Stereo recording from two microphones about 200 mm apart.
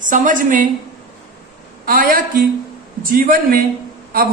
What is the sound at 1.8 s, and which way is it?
Speech, 45° right (ahead or behind).